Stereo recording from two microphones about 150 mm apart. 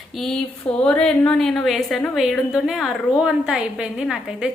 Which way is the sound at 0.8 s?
5° left (ahead or behind).